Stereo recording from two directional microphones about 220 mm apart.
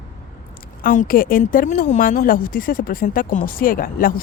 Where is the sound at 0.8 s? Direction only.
35° left (ahead or behind).